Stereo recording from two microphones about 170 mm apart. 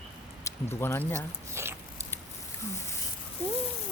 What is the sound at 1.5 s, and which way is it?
Biting, 15° right (ahead or behind).